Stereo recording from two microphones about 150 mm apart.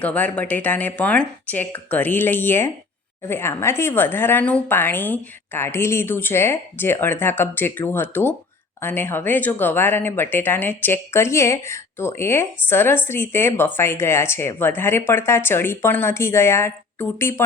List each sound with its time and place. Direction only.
0.0 s speech: 10° left (ahead or behind)